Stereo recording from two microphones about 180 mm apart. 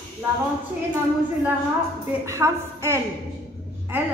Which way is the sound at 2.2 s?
15° right (ahead or behind).